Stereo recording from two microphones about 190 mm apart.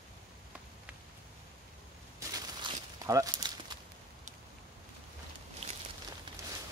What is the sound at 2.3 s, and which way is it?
Walk, 20° right (ahead or behind).